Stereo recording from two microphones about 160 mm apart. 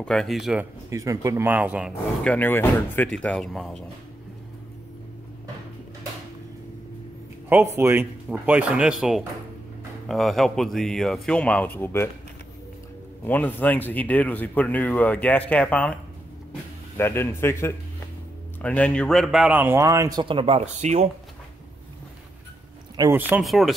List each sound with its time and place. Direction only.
0.0 s speech: 5° left (ahead or behind)
0.8 s speech: 20° right (ahead or behind)
2.2 s speech: 10° left (ahead or behind)
7.4 s speech: 15° right (ahead or behind); by 12.1 s 15° left (ahead or behind)
13.2 s a man's voice: 10° left (ahead or behind); by 21.1 s 45° right (ahead or behind)
23.0 s speech: 25° right (ahead or behind)
23.4 s speech: centre (ahead or behind)